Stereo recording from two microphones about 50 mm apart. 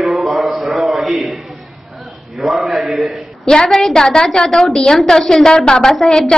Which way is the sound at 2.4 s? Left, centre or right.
Centre.